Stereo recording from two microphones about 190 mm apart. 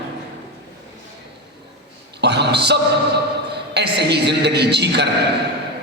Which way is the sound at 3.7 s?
60° right (ahead or behind).